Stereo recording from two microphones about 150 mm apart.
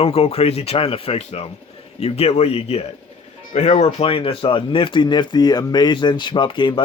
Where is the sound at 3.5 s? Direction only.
55° left (ahead or behind).